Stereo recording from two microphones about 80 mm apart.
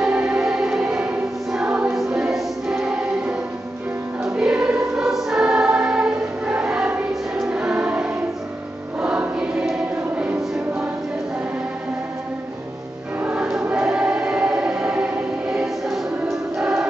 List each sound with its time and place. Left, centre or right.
0.0 s choir: centre
7.3 s music: centre
9.0 s choir: centre
13.2 s music: centre
13.7 s choir: centre